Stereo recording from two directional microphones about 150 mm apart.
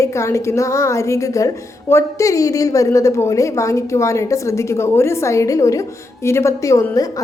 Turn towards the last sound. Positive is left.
turn(degrees=20)  # may be behind; listen again after turning